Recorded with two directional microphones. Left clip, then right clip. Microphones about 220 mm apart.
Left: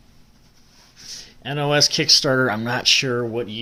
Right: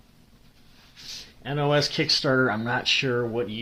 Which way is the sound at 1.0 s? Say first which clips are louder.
Left 2 dB; 20° left (ahead or behind).